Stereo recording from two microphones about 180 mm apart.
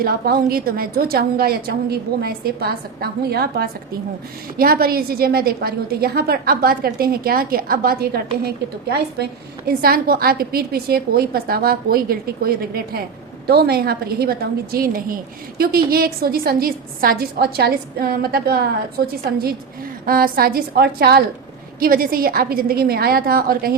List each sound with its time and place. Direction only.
0.0 s a woman's voice: 55° right (ahead or behind)